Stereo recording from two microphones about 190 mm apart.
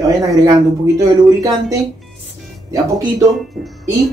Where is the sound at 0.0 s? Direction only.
15° right (ahead or behind).